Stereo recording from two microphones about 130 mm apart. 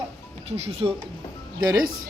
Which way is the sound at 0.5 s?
55° right (ahead or behind).